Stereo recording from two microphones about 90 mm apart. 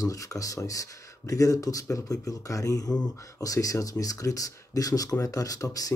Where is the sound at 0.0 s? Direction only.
40° left (ahead or behind).